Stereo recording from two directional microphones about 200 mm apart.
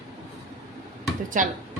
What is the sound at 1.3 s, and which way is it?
Speech, 40° right (ahead or behind).